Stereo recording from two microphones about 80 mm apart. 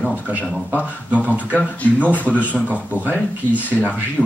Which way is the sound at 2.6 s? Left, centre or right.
Centre.